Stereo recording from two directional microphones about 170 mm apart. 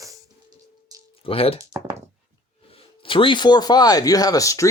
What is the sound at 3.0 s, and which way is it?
Speech, 30° left (ahead or behind).